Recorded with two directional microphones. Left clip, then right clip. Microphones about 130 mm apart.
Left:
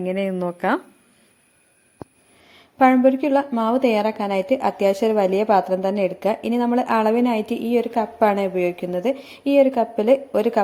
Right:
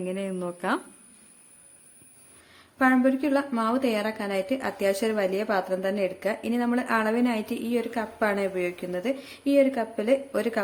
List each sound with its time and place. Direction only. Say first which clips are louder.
0.0 s a woman's voice: left 8 dB; 35° left (ahead or behind)
2.5 s a woman's voice: left 7 dB; 35° left (ahead or behind)